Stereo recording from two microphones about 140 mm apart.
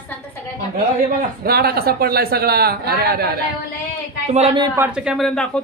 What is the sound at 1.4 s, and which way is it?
Speech, 90° right.